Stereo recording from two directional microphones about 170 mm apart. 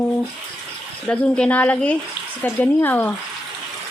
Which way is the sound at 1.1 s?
5° left (ahead or behind).